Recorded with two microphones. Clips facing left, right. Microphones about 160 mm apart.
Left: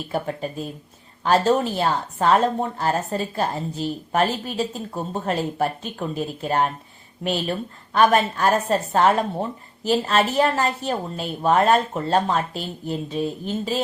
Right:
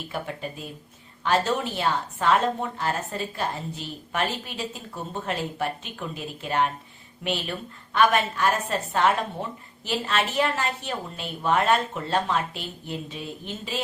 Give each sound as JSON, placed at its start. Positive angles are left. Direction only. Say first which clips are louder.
{"t": 0.1, "sound": "a woman's voice", "louder": "left 7 dB", "side_deg": 40}
{"t": 7.9, "sound": "a woman's voice", "louder": "left 4 dB", "side_deg": 40}